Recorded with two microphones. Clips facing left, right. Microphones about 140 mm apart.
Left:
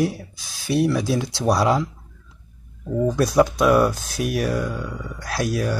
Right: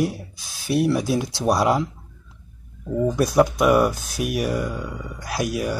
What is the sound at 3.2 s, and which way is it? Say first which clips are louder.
Speech: even; 15° right (ahead or behind).